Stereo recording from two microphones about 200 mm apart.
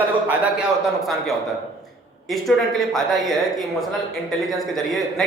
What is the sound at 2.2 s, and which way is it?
A woman's voice, centre (ahead or behind).